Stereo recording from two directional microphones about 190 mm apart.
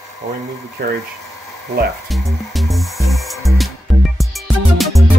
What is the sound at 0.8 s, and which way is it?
Speech, 55° right (ahead or behind).